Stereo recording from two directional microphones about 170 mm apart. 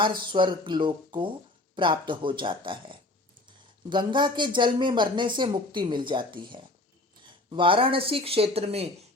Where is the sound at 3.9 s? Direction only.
25° right (ahead or behind).